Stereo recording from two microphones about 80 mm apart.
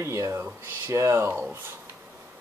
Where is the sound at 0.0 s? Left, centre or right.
Right.